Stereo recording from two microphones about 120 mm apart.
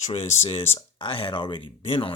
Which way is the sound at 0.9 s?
45° left (ahead or behind).